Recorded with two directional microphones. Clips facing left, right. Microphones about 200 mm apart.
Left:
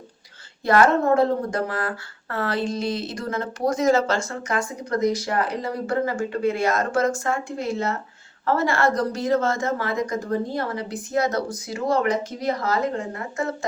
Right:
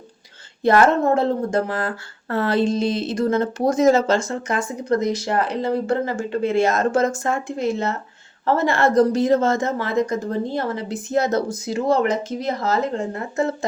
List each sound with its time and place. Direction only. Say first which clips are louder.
0.6 s a woman's voice: right 2 dB; 25° right (ahead or behind)